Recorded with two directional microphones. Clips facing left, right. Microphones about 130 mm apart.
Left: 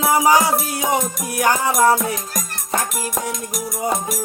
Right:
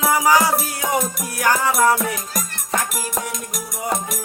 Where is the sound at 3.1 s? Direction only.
Centre (ahead or behind).